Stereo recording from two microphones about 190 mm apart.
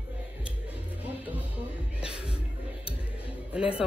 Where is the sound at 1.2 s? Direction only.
10° right (ahead or behind).